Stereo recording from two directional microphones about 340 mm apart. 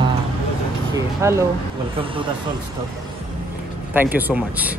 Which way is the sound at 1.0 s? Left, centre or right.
Centre.